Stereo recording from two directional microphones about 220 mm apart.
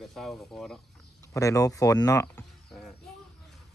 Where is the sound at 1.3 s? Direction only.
15° left (ahead or behind).